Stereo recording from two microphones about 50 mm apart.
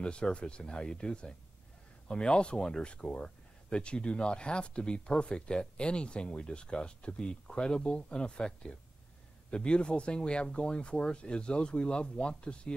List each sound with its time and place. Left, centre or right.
0.0 s speech: left